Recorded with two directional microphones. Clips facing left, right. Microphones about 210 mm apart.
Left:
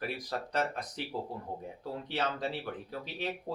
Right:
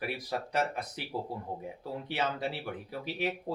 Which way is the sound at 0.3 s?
10° right (ahead or behind).